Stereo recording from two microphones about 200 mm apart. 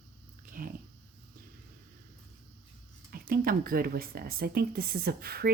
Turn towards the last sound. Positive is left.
turn(degrees=-50)  # may be behind; listen again after turning